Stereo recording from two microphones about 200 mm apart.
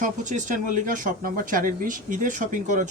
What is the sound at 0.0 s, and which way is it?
Speech, 40° right (ahead or behind).